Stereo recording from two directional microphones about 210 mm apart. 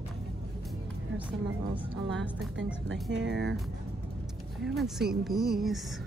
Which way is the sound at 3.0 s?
55° right (ahead or behind).